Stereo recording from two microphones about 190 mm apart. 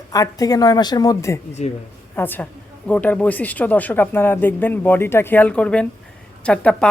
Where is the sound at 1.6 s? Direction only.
35° left (ahead or behind).